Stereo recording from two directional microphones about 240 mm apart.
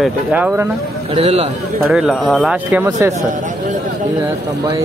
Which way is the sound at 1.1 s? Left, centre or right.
Right.